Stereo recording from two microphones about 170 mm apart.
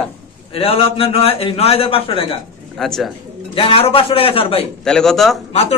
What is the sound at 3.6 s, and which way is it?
A man's voice, 35° left (ahead or behind).